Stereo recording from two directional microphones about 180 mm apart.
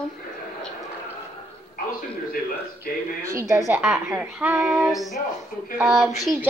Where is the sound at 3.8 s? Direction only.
5° right (ahead or behind).